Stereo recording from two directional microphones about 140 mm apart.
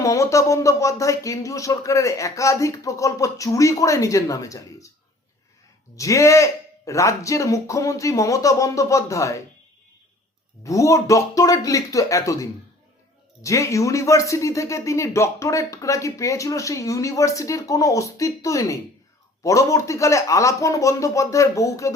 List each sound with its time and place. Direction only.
0.0 s speech: 20° left (ahead or behind)
6.0 s speech: 20° left (ahead or behind)
10.6 s speech: 20° left (ahead or behind)